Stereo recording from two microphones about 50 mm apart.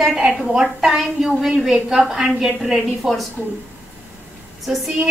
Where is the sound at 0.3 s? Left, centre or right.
Centre.